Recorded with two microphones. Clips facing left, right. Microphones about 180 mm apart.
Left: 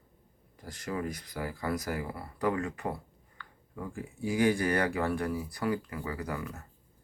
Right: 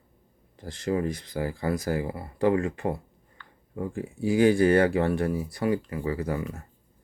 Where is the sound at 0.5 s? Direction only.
25° right (ahead or behind).